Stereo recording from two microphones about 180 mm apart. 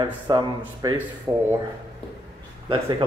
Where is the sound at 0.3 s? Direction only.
25° right (ahead or behind).